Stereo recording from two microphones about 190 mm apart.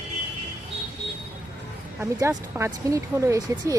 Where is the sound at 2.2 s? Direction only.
15° right (ahead or behind).